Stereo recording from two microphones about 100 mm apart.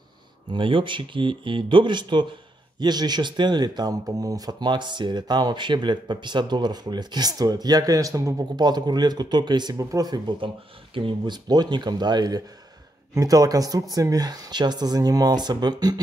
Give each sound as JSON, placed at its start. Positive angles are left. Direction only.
{"t": 0.5, "sound": "speech", "side_deg": -60}
{"t": 9.8, "sound": "speech", "side_deg": -35}